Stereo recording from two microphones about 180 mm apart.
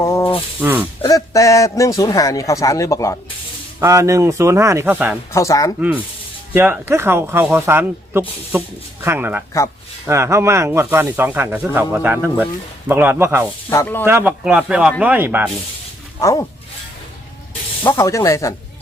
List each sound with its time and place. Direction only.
0.0 s a sound: 15° left (ahead or behind)
0.6 s a sound: 10° right (ahead or behind)
1.0 s a man's voice: 20° left (ahead or behind)
3.8 s speech: 15° right (ahead or behind)
5.3 s a man's voice: 15° left (ahead or behind)
6.5 s speech: 15° right (ahead or behind)
13.7 s a man's voice: 15° left (ahead or behind)
14.0 s speech: 10° right (ahead or behind)
16.2 s a man's voice: 15° left (ahead or behind)
17.8 s a man's voice: 15° left (ahead or behind)